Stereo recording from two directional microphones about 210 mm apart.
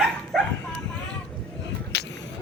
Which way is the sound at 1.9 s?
55° left (ahead or behind).